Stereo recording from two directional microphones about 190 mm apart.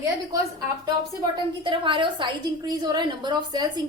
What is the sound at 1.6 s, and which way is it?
A woman's voice, 25° right (ahead or behind).